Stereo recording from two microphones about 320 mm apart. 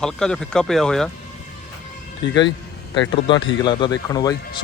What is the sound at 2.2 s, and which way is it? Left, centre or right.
Speech, left.